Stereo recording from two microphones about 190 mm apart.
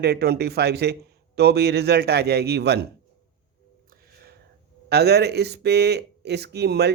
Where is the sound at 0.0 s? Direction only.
60° right (ahead or behind).